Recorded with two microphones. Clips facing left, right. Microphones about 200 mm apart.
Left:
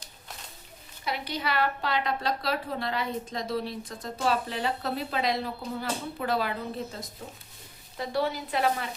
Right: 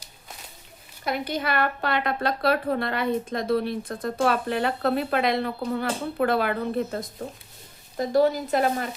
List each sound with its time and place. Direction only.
1.0 s a woman's voice: 50° right (ahead or behind)
7.9 s speech: 45° right (ahead or behind)